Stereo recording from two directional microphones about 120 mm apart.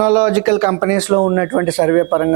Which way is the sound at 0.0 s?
20° right (ahead or behind).